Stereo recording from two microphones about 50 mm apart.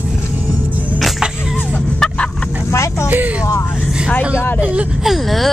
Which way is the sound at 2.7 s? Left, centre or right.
Left.